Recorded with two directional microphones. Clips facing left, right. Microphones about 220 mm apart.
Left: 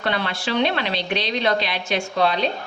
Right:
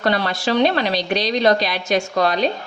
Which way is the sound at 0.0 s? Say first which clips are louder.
Right 5 dB; 40° right (ahead or behind).